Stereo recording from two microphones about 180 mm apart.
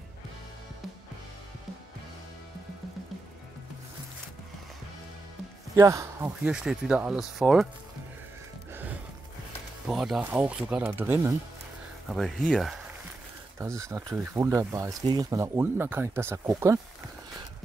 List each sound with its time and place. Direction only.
5.8 s speech: 15° right (ahead or behind); by 7.6 s centre (ahead or behind)
9.8 s speech: centre (ahead or behind)
12.1 s speech: centre (ahead or behind)
13.6 s speech: 15° right (ahead or behind)